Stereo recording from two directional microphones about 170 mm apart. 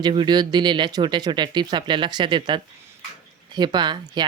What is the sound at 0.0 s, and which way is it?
Speech, 25° right (ahead or behind).